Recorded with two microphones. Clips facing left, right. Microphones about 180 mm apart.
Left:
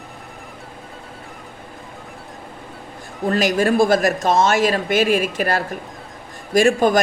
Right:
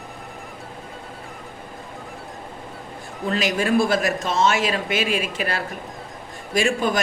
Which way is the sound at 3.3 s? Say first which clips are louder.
Left 4 dB; 45° left (ahead or behind).